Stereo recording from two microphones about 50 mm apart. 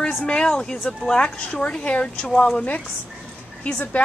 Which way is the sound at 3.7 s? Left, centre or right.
Left.